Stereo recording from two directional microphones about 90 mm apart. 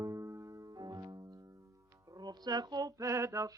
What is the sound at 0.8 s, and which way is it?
Music, 50° right (ahead or behind).